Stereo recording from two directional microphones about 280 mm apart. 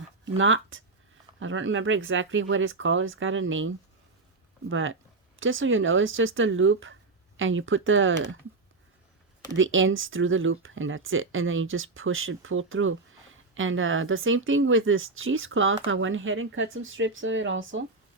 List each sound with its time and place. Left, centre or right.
0.3 s speech: right
4.7 s speech: right
9.6 s speech: right